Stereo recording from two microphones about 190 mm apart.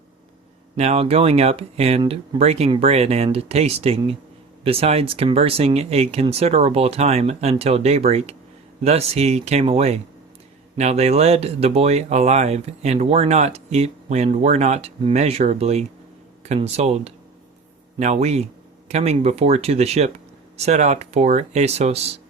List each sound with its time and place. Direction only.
0.8 s speech: 35° right (ahead or behind)